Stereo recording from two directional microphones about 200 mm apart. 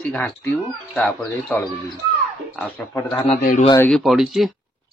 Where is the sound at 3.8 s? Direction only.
Centre (ahead or behind).